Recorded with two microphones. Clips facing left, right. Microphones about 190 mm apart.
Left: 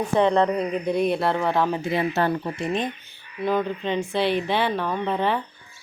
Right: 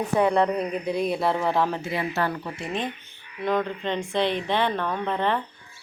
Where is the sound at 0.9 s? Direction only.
Centre (ahead or behind).